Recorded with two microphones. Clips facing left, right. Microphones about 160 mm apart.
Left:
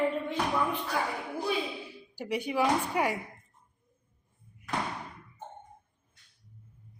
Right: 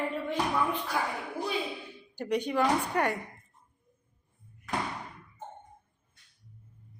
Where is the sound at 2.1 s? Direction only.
5° left (ahead or behind).